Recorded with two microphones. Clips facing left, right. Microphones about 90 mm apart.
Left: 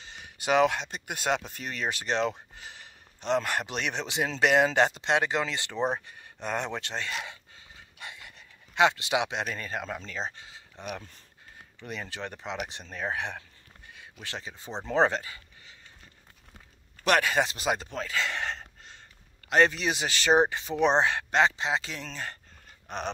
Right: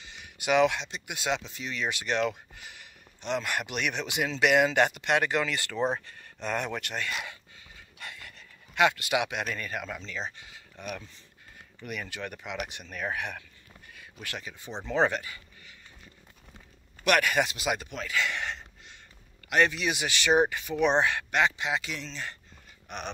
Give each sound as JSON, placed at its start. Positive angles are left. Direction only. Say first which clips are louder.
{"t": 0.0, "sound": "speech", "louder": "left 1 dB", "side_deg": 35}
{"t": 17.0, "sound": "speech", "louder": "even", "side_deg": 30}
{"t": 22.0, "sound": "speech", "louder": "left 1 dB", "side_deg": 40}
{"t": 22.8, "sound": "dog", "louder": "left 4 dB", "side_deg": 35}